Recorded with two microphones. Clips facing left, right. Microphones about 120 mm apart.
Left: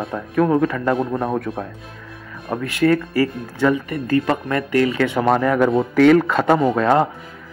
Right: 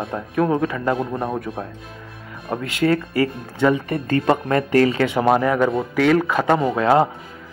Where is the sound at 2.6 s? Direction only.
20° right (ahead or behind).